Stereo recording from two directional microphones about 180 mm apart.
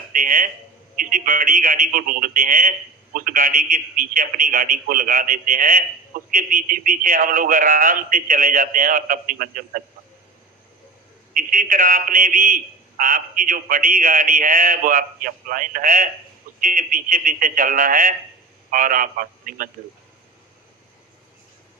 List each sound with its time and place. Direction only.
0.1 s a sound: 50° right (ahead or behind)
0.9 s a man's voice: 50° right (ahead or behind)
11.3 s a man's voice: 50° right (ahead or behind)